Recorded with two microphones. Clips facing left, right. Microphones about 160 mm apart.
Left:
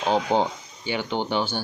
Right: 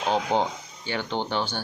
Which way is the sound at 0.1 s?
15° left (ahead or behind).